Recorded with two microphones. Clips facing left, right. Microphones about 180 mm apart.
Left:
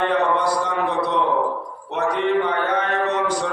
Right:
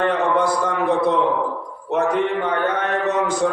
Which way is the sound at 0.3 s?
50° right (ahead or behind).